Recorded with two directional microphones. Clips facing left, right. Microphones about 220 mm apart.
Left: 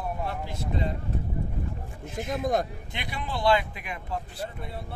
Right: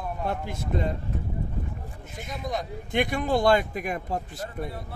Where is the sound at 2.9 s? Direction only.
50° right (ahead or behind).